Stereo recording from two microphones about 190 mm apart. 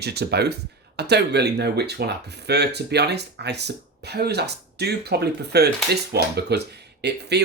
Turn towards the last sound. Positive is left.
turn(degrees=-60)  # may be behind; listen again after turning